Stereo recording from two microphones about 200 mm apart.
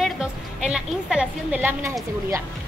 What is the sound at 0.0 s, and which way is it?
A woman's voice, 5° right (ahead or behind).